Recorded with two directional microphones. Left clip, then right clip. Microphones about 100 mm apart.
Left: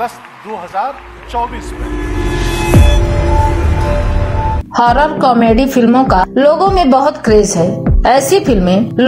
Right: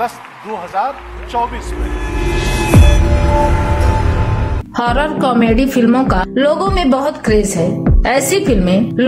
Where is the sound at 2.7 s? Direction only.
Centre (ahead or behind).